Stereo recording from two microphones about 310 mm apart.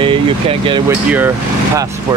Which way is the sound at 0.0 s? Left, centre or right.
Centre.